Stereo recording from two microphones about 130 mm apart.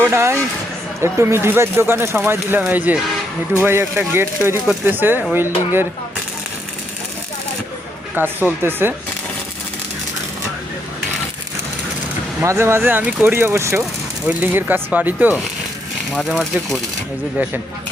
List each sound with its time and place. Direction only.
0.0 s speech: 20° right (ahead or behind)
8.2 s speech: 15° right (ahead or behind)
12.4 s speech: 20° right (ahead or behind)